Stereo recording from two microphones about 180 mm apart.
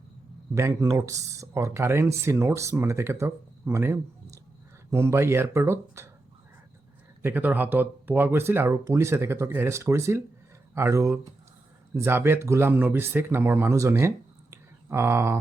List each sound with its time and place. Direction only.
0.5 s speech: 15° right (ahead or behind)
7.2 s speech: 10° right (ahead or behind)
14.5 s a sound: 15° right (ahead or behind)